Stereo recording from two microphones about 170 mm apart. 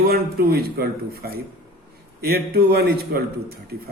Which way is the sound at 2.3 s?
70° right (ahead or behind).